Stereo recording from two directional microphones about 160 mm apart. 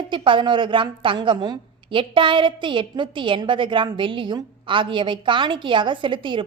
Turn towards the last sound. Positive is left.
turn(degrees=-30)  # may be behind; listen again after turning